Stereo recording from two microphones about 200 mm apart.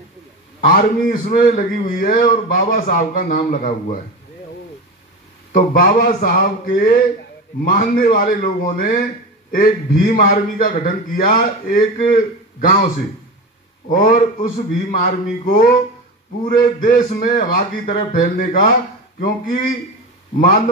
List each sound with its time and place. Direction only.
0.6 s a man's voice: 45° left (ahead or behind)
5.5 s a man's voice: 45° left (ahead or behind)
13.8 s a man's voice: 40° left (ahead or behind)